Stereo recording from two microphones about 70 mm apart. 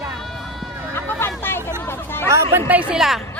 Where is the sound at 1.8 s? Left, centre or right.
Left.